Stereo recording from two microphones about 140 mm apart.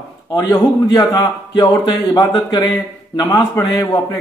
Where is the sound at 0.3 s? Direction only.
25° left (ahead or behind).